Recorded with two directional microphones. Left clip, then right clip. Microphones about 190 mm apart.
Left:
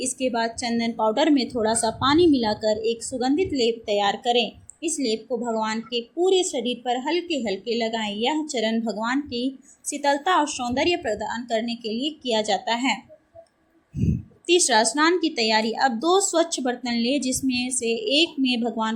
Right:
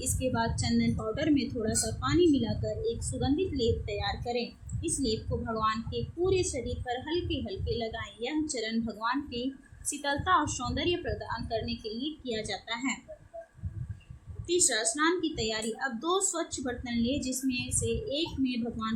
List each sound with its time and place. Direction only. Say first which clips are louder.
0.0 s a woman's voice: left 7 dB; 15° left (ahead or behind)
14.4 s a woman's voice: left 10 dB; 25° left (ahead or behind)